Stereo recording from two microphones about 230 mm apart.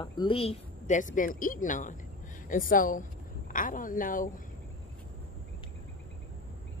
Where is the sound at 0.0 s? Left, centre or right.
Left.